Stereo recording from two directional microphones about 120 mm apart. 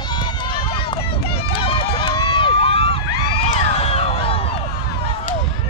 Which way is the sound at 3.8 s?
60° left (ahead or behind).